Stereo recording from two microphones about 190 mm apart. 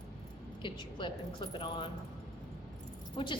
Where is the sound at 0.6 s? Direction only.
25° left (ahead or behind).